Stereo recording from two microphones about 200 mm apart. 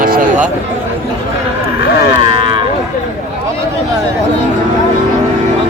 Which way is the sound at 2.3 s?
25° right (ahead or behind).